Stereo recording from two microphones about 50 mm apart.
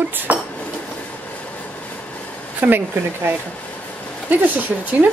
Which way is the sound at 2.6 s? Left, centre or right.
Right.